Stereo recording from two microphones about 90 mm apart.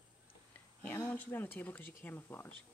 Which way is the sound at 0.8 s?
25° left (ahead or behind).